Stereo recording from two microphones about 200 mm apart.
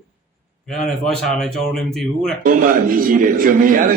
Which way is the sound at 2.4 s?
45° right (ahead or behind).